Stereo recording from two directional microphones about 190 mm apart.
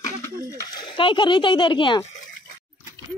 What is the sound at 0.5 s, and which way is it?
Speech, 20° left (ahead or behind).